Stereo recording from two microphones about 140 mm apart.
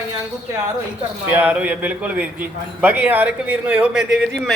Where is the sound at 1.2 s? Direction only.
15° right (ahead or behind).